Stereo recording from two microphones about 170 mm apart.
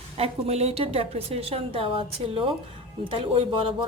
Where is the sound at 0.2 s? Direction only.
35° right (ahead or behind).